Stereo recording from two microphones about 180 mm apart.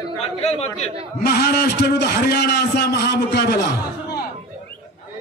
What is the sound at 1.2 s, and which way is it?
A man's voice, 60° left (ahead or behind).